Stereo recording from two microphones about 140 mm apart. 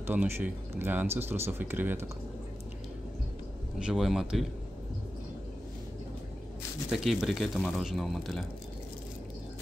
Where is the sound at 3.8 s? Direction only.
Centre (ahead or behind).